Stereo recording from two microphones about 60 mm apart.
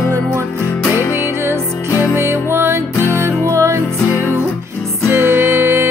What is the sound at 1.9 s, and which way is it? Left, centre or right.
Music, left.